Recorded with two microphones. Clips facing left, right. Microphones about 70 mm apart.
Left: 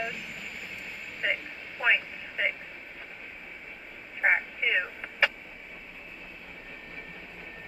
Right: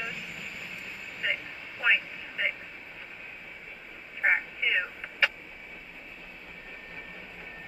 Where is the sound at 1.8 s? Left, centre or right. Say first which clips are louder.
Even; centre.